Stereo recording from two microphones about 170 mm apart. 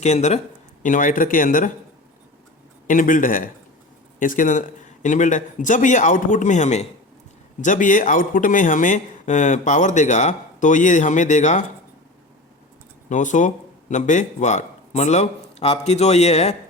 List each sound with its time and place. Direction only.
0.0 s speech: 40° left (ahead or behind)
2.8 s speech: 50° left (ahead or behind)
13.1 s a man's voice: 45° left (ahead or behind)